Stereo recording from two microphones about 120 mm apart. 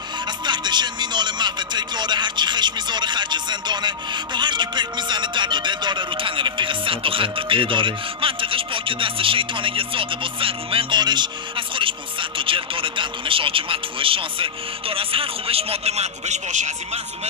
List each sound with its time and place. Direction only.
0.5 s music: 40° right (ahead or behind); by 17.0 s 75° right (ahead or behind)